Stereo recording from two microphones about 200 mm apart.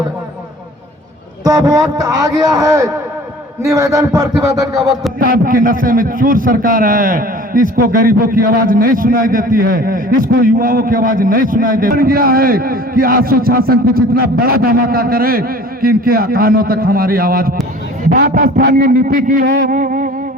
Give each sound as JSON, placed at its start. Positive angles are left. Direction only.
{"t": 1.5, "sound": "a man's voice", "side_deg": -20}
{"t": 5.2, "sound": "a man's voice", "side_deg": -45}